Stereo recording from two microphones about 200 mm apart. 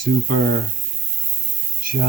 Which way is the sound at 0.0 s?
45° right (ahead or behind).